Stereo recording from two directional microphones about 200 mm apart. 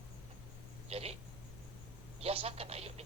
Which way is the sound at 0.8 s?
30° right (ahead or behind).